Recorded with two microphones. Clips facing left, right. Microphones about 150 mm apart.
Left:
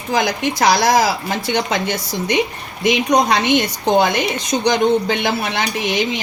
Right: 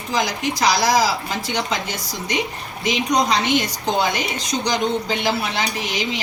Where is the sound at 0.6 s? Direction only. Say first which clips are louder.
Left 3 dB; 55° left (ahead or behind).